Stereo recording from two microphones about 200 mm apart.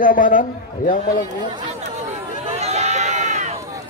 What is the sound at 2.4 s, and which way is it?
Crowd, 35° right (ahead or behind).